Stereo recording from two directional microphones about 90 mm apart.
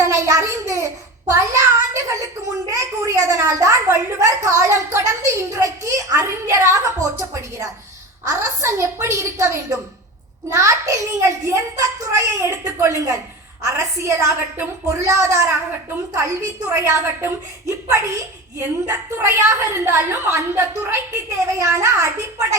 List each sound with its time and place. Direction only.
0.0 s a sound: 35° right (ahead or behind)
8.3 s a woman's voice: 35° right (ahead or behind)
16.7 s a woman's voice: 30° right (ahead or behind)